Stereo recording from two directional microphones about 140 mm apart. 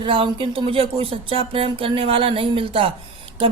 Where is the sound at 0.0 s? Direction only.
40° right (ahead or behind).